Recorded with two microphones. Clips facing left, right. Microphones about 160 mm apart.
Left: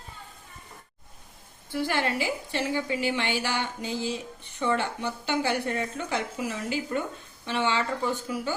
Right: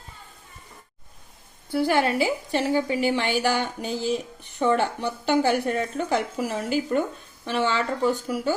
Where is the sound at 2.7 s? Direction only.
40° right (ahead or behind).